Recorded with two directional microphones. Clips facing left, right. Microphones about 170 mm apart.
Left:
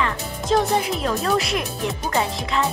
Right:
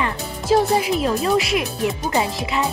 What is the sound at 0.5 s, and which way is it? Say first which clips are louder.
Speech: right 3 dB; 5° right (ahead or behind).